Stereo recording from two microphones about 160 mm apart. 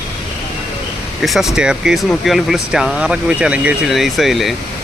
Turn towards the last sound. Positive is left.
turn(degrees=0)  # may be behind; listen again after turning